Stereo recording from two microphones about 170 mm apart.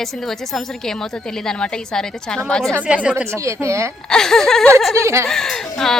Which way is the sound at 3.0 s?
15° right (ahead or behind).